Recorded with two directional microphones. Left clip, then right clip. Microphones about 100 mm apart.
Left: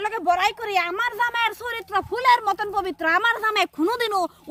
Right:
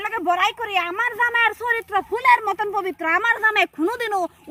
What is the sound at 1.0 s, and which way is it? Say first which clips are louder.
Speech: right 2 dB; 55° left (ahead or behind).